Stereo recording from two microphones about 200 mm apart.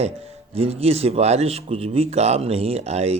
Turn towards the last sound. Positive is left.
turn(degrees=-30)  # may be behind; listen again after turning